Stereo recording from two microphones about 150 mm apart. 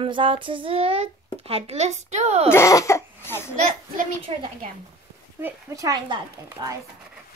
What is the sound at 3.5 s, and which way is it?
Speech, 55° right (ahead or behind).